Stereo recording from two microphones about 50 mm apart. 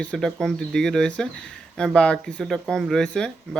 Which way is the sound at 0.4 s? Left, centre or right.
Centre.